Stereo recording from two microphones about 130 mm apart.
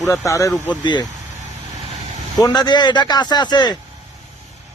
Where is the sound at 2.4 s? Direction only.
30° left (ahead or behind).